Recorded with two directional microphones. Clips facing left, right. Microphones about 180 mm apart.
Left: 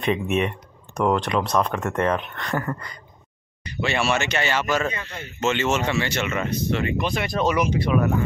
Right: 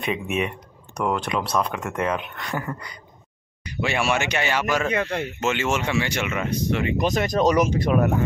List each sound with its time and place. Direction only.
0.3 s speech: 5° right (ahead or behind)
4.9 s a man's voice: 75° right (ahead or behind)
5.4 s speech: 10° right (ahead or behind)
7.0 s speech: 40° right (ahead or behind)